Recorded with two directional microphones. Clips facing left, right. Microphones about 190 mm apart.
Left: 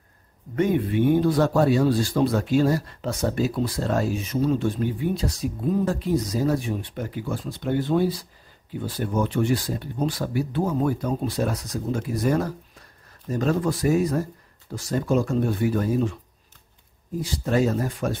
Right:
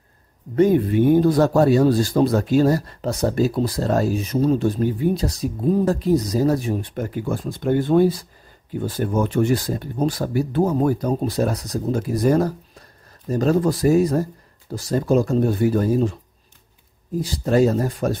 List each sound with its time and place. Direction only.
0.6 s a man's voice: 40° right (ahead or behind)
17.2 s a man's voice: 35° right (ahead or behind)